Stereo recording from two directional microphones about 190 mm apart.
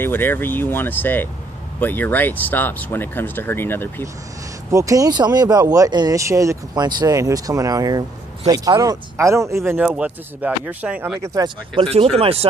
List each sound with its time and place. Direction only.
0.0 s speech: 10° left (ahead or behind)
4.7 s speech: 15° right (ahead or behind)
11.8 s speech: 30° right (ahead or behind)